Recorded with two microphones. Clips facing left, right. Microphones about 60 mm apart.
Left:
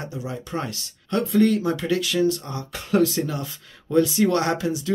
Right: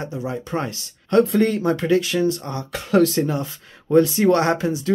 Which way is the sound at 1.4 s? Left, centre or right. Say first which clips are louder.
Right 1 dB; right.